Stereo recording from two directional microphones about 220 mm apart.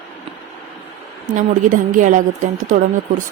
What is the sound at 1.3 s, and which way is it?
Speech, 35° right (ahead or behind).